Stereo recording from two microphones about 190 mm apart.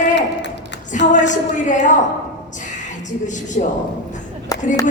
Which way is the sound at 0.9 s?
40° left (ahead or behind).